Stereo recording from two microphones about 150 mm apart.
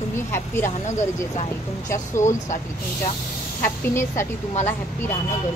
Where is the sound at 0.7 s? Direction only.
50° left (ahead or behind).